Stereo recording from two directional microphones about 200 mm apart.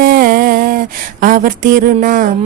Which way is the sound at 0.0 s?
45° right (ahead or behind).